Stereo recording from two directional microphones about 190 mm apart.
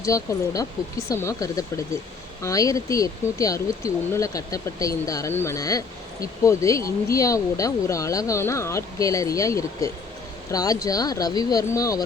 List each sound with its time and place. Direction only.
0.0 s speech: 15° left (ahead or behind)